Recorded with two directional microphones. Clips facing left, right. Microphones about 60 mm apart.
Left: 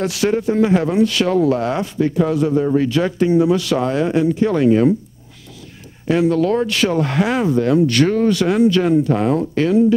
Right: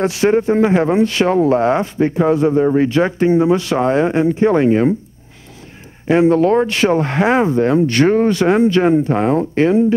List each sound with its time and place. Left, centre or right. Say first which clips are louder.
0.0 s speech: right 4 dB; right
6.0 s speech: right 4 dB; right